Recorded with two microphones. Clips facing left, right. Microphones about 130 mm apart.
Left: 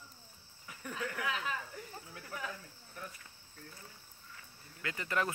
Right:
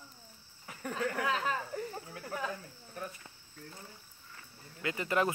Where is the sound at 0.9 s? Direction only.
40° right (ahead or behind).